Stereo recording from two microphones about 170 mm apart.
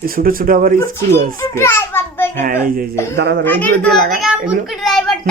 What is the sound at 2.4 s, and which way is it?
Speech, 55° right (ahead or behind).